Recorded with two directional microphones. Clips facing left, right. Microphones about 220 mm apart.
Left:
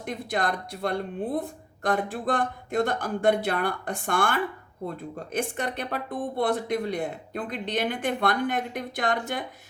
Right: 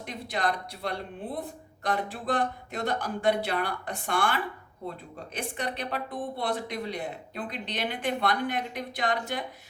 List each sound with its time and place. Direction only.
0.0 s speech: 50° left (ahead or behind)